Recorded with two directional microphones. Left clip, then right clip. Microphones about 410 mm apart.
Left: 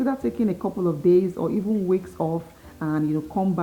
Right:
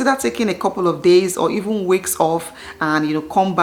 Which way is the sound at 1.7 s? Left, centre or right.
Right.